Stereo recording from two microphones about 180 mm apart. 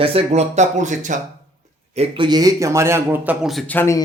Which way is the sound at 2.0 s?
25° right (ahead or behind).